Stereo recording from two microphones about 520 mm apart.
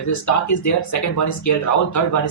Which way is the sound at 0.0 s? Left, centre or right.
Left.